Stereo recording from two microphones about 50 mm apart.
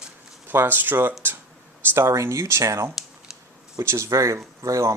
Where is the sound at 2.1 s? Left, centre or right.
Right.